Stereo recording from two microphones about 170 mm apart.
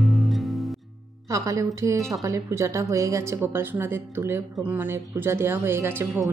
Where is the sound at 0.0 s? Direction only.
Centre (ahead or behind).